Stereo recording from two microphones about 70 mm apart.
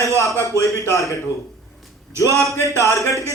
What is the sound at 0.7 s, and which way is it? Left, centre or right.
Speech, left.